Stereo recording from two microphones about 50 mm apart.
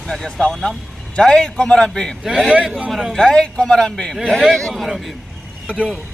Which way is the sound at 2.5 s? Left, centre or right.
Centre.